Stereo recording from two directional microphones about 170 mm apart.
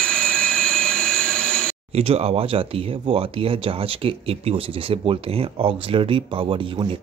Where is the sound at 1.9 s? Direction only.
35° right (ahead or behind).